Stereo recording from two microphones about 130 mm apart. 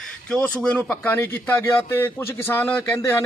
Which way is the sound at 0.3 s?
10° left (ahead or behind).